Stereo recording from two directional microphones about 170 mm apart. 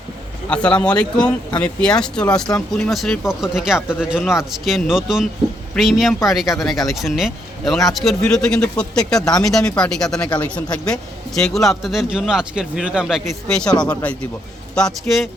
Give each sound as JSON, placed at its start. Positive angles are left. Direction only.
{"t": 0.5, "sound": "a man's voice", "side_deg": 5}
{"t": 14.8, "sound": "a man's voice", "side_deg": 5}